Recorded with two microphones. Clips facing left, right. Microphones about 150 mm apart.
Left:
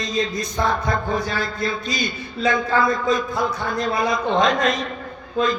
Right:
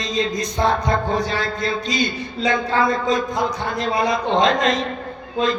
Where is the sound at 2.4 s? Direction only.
30° right (ahead or behind).